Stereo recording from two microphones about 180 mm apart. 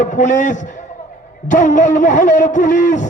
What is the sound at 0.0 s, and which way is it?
A man's voice, 45° left (ahead or behind).